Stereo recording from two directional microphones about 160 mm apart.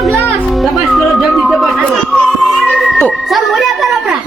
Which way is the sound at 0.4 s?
Centre (ahead or behind).